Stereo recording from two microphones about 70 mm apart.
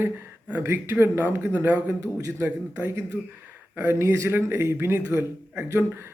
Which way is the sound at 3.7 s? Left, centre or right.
Right.